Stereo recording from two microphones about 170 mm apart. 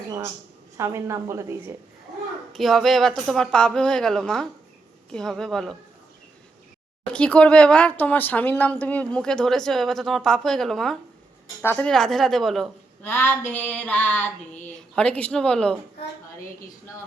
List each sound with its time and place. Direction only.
0.8 s a woman's voice: 15° right (ahead or behind)
2.5 s speech: centre (ahead or behind)
7.0 s speech: 5° left (ahead or behind)
13.1 s speech: 15° left (ahead or behind)